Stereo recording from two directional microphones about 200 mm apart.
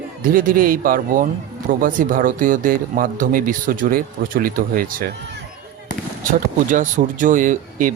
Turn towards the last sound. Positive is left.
turn(degrees=-40)  # may be behind; listen again after turning